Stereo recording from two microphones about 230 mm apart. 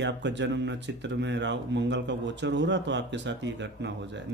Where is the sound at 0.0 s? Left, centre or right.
Right.